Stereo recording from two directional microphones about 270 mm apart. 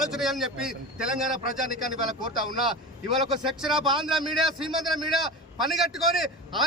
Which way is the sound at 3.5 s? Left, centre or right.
Centre.